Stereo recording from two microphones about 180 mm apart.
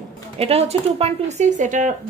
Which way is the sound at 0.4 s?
35° right (ahead or behind).